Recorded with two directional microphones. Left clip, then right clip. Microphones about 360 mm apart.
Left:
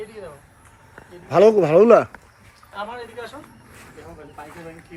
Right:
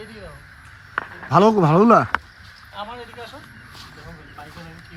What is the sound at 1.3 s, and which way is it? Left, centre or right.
Speech, centre.